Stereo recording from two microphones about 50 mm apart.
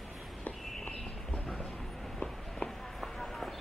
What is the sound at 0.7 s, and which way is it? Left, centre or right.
Walk, centre.